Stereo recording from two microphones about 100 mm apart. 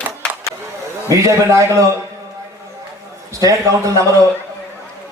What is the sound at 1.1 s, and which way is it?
Speech, 35° right (ahead or behind).